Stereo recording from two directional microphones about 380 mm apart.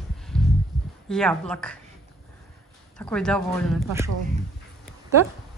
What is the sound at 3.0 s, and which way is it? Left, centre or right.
Speech, centre.